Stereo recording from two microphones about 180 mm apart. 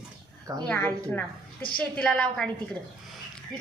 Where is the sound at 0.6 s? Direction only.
10° left (ahead or behind).